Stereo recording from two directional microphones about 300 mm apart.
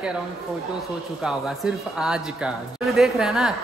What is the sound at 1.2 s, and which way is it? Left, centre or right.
Speech, centre.